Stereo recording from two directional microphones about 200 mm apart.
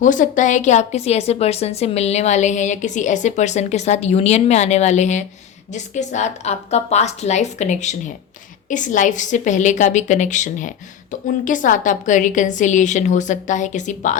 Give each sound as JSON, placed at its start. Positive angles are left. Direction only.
{"t": 0.0, "sound": "a woman's voice", "side_deg": 40}